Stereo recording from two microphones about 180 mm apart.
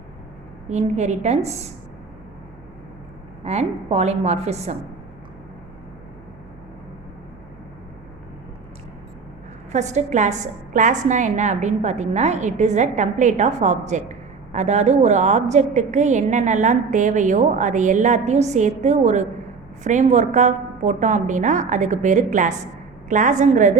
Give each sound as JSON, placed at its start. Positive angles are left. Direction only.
{"t": 0.7, "sound": "a woman's voice", "side_deg": -40}
{"t": 3.4, "sound": "a woman's voice", "side_deg": -35}
{"t": 9.7, "sound": "a woman's voice", "side_deg": -40}